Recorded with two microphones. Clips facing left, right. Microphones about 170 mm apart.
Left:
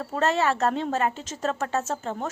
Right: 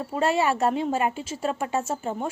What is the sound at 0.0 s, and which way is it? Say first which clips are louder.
A woman's voice: right 1 dB; 10° right (ahead or behind).